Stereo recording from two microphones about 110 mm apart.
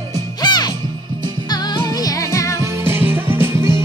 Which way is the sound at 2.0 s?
30° left (ahead or behind).